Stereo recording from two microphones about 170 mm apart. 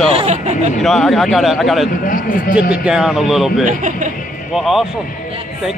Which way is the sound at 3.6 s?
50° right (ahead or behind).